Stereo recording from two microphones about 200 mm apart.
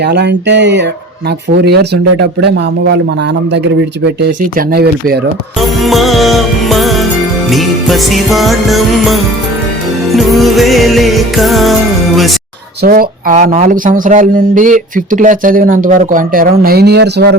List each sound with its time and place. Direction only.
0.0 s speech: 60° right (ahead or behind)
4.0 s speech: 55° right (ahead or behind)
5.5 s music: centre (ahead or behind)
12.8 s speech: 45° right (ahead or behind)